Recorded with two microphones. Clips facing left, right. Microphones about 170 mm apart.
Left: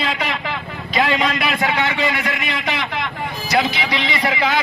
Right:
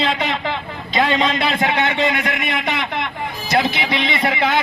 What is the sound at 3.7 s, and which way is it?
Speech, 20° right (ahead or behind).